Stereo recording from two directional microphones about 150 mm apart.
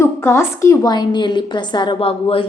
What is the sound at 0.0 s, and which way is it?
A woman's voice, 20° left (ahead or behind).